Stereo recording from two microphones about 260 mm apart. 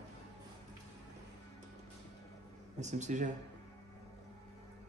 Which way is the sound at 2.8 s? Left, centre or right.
Right.